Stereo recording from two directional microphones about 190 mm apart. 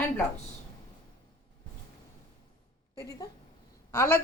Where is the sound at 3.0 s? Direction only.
15° left (ahead or behind).